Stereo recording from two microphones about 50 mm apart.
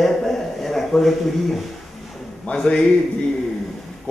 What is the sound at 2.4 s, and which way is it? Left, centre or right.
Speech, left.